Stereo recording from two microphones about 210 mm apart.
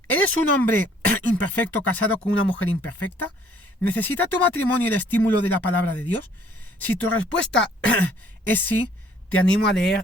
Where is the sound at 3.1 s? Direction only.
10° left (ahead or behind).